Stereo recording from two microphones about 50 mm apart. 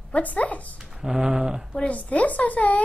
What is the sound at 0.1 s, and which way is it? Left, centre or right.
Speech, left.